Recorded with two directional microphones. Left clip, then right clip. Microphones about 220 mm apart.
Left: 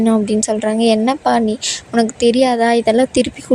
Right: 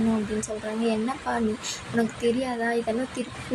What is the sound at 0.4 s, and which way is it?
A woman's voice, 45° left (ahead or behind).